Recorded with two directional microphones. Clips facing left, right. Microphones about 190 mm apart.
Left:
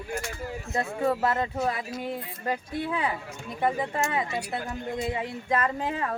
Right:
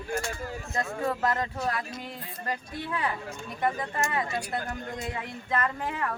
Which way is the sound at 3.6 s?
20° left (ahead or behind).